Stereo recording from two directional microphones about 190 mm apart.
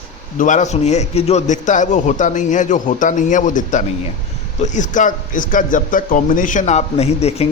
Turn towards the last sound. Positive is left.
turn(degrees=35)  # may be behind; listen again after turning